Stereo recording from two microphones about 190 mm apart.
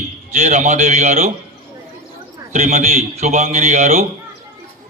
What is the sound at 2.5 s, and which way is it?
A man's voice, 40° right (ahead or behind).